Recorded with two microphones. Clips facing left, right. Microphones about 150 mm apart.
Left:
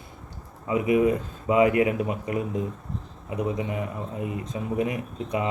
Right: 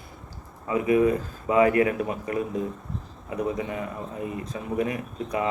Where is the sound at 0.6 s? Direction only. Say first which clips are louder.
Even; 20° left (ahead or behind).